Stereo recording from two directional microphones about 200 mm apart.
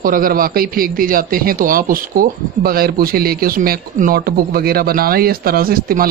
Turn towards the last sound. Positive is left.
turn(degrees=-45)  # may be behind; listen again after turning